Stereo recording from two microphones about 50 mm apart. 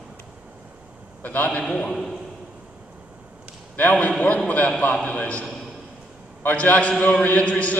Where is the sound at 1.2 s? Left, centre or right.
Left.